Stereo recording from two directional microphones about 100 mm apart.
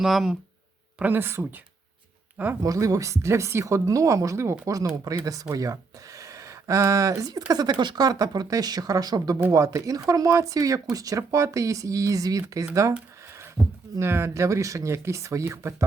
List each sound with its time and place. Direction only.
0.0 s speech: 5° right (ahead or behind)
0.9 s speech: 20° right (ahead or behind)
2.6 s speech: 35° right (ahead or behind)
6.1 s a sound: 35° right (ahead or behind)
7.2 s speech: 40° right (ahead or behind)